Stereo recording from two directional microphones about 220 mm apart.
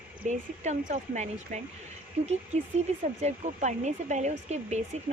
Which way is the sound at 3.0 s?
30° right (ahead or behind).